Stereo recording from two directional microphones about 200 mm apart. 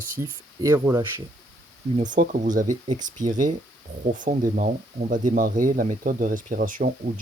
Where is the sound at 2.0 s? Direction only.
40° right (ahead or behind).